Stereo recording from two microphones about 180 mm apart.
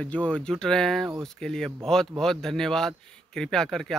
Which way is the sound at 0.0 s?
5° left (ahead or behind).